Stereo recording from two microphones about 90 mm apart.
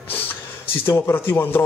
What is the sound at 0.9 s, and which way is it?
Speech, 25° left (ahead or behind).